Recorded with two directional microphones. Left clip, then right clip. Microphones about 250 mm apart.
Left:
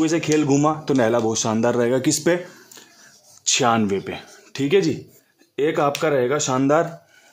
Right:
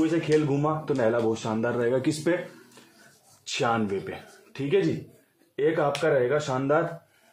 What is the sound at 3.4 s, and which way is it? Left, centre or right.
Speech, left.